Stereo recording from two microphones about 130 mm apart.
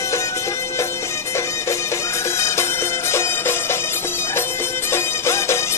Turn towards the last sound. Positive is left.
turn(degrees=20)  # may be behind; listen again after turning